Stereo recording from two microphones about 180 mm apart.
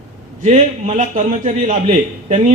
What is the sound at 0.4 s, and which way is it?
A man's voice, 40° right (ahead or behind).